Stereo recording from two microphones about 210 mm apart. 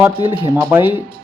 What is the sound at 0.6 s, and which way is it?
Speech, 10° right (ahead or behind).